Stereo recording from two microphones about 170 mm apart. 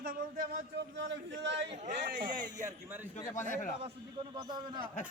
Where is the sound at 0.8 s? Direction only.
90° right.